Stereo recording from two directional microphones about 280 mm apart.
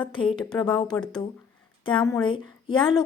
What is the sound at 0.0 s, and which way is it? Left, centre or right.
A woman's voice, centre.